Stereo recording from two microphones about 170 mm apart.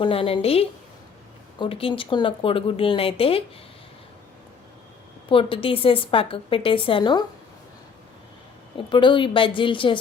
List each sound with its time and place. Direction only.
0.0 s a woman's voice: 35° left (ahead or behind)
5.3 s a woman's voice: 30° left (ahead or behind)
8.9 s speech: 30° left (ahead or behind)